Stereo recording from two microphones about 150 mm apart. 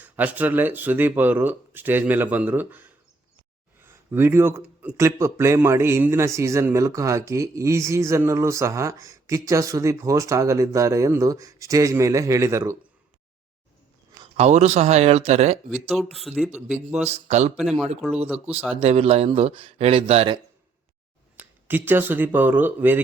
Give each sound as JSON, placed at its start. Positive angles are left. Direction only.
{"t": 0.0, "sound": "speech", "side_deg": -10}
{"t": 14.3, "sound": "speech", "side_deg": -45}
{"t": 15.7, "sound": "speech", "side_deg": -5}
{"t": 17.0, "sound": "speech", "side_deg": -45}
{"t": 17.6, "sound": "speech", "side_deg": -5}
{"t": 18.7, "sound": "speech", "side_deg": -40}
{"t": 21.3, "sound": "speech", "side_deg": -15}